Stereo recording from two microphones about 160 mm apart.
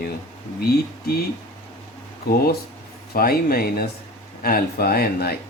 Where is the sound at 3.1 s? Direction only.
70° left (ahead or behind).